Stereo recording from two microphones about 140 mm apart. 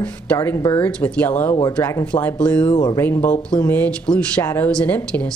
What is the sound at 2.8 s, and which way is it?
Speech, 20° left (ahead or behind).